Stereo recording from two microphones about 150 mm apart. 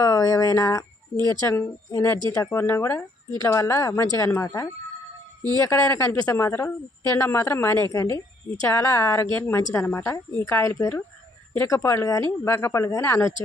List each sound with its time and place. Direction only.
0.0 s speech: 25° left (ahead or behind)
5.7 s a woman's voice: 15° left (ahead or behind)